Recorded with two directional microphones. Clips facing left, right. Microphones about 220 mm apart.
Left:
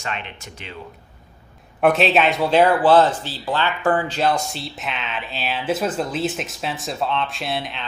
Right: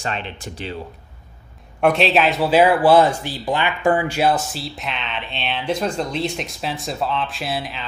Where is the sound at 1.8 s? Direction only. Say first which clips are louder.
Even; centre (ahead or behind).